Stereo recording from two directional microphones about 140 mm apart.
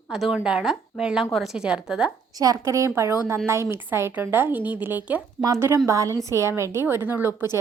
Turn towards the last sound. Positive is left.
turn(degrees=-15)  # may be behind; listen again after turning